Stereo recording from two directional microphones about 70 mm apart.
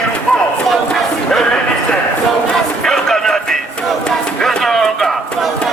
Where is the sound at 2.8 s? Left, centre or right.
Centre.